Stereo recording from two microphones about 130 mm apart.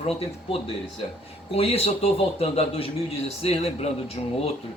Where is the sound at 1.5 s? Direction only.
50° left (ahead or behind).